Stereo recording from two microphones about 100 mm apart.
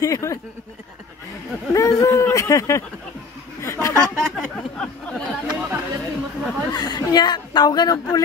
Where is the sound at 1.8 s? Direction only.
30° left (ahead or behind).